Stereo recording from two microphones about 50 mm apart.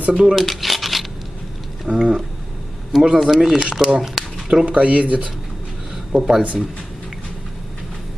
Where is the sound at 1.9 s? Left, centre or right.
Centre.